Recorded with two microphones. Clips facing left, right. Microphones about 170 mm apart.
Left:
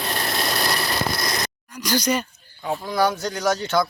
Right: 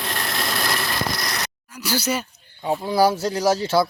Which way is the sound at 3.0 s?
30° right (ahead or behind).